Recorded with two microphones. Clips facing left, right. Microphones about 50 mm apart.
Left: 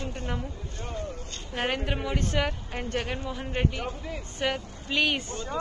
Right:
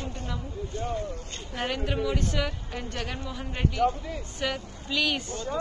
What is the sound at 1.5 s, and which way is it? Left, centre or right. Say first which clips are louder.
Speech: left 2 dB; left.